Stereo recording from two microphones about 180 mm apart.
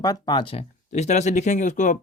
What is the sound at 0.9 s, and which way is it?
Speech, 40° left (ahead or behind).